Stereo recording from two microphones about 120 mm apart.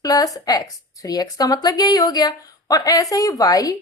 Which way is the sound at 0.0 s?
30° left (ahead or behind).